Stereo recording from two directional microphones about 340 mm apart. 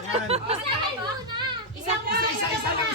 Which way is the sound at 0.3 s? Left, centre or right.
Centre.